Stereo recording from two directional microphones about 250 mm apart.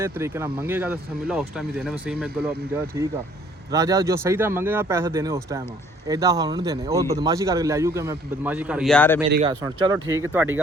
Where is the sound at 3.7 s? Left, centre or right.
Centre.